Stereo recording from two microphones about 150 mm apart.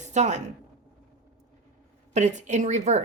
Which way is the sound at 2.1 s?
50° right (ahead or behind).